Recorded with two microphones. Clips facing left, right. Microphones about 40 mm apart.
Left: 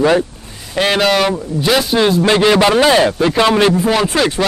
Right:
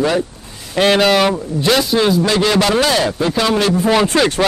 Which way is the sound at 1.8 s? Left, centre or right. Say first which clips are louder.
Left 1 dB; centre.